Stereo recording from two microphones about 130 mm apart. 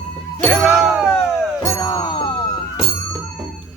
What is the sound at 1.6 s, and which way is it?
Music, 25° left (ahead or behind).